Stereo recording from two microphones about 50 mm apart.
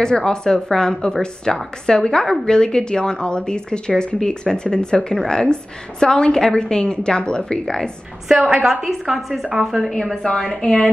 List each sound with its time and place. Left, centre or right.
0.0 s speech: centre
8.3 s a woman's voice: centre
10.2 s speech: centre